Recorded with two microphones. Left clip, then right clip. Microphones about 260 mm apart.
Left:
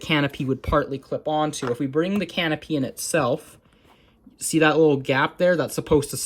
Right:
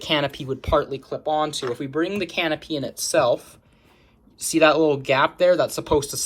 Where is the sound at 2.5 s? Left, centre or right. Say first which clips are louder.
Left 1 dB; left.